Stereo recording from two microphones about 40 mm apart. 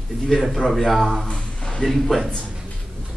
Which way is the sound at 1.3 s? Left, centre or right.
Left.